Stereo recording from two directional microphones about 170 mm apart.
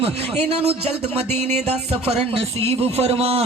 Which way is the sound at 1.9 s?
35° right (ahead or behind).